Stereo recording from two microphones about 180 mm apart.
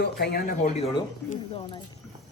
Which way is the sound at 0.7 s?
35° left (ahead or behind).